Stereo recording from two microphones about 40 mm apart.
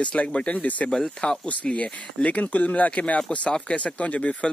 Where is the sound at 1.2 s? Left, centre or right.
Left.